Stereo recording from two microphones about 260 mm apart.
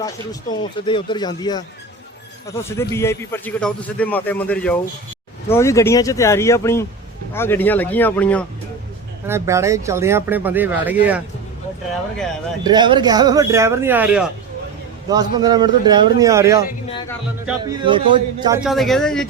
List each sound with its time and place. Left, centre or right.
0.0 s a man's voice: centre
9.2 s speech: centre
12.6 s speech: centre
18.7 s speech: centre